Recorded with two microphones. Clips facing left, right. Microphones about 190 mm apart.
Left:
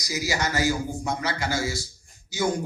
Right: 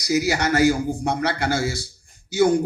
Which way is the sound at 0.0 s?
60° right (ahead or behind).